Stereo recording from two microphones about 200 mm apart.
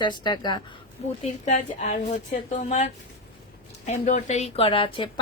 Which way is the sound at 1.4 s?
35° left (ahead or behind).